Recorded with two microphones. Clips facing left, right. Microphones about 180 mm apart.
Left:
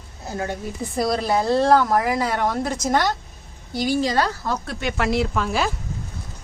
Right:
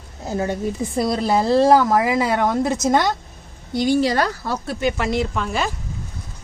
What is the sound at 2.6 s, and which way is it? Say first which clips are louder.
Speech: right 3 dB; 25° right (ahead or behind).